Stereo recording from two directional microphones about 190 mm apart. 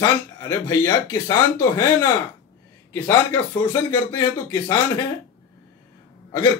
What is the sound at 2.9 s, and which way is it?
Speech, 10° left (ahead or behind).